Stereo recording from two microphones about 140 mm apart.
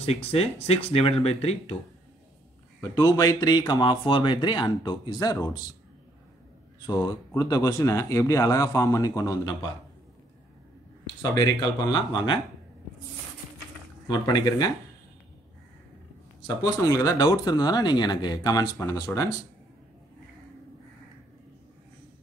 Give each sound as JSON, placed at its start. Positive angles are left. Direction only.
{"t": 0.0, "sound": "speech", "side_deg": 45}
{"t": 2.9, "sound": "speech", "side_deg": 25}
{"t": 6.9, "sound": "speech", "side_deg": 30}
{"t": 11.3, "sound": "speech", "side_deg": 30}
{"t": 14.0, "sound": "speech", "side_deg": 30}
{"t": 16.4, "sound": "speech", "side_deg": 25}